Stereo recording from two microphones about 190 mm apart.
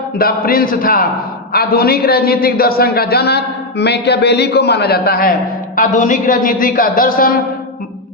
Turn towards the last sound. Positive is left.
turn(degrees=50)  # may be behind; listen again after turning